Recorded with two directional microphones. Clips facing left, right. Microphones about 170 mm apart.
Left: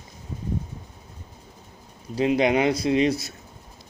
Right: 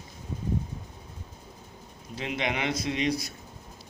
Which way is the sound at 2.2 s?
40° left (ahead or behind).